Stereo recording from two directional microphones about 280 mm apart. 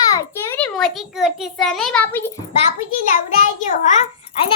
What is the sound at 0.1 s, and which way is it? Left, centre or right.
A child's voice, centre.